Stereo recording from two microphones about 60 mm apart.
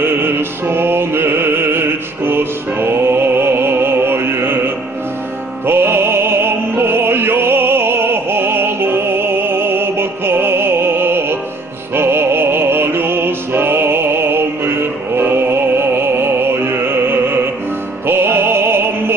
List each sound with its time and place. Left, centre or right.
0.0 s music: right
5.7 s opera: right
11.9 s music: right